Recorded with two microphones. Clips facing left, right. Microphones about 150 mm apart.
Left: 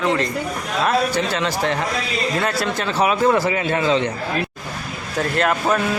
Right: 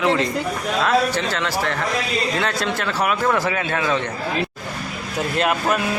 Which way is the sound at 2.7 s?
20° left (ahead or behind).